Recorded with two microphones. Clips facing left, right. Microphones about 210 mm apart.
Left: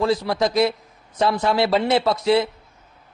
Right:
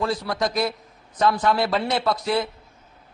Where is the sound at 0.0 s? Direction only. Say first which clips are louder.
Left 4 dB; 25° left (ahead or behind).